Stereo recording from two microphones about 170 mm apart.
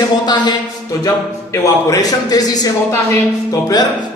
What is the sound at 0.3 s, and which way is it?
Speech, 25° left (ahead or behind).